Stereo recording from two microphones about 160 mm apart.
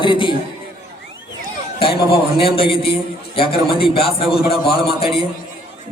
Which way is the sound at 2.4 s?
35° left (ahead or behind).